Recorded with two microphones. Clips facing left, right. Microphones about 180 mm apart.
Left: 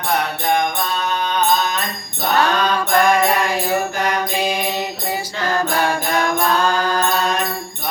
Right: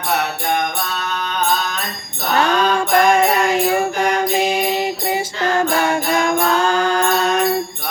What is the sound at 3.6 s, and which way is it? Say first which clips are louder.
Music: right 3 dB; 25° right (ahead or behind).